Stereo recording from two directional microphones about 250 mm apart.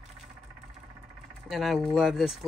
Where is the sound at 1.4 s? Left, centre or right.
Centre.